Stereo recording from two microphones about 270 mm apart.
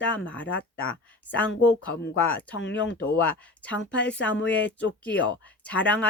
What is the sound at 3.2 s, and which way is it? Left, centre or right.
Speech, centre.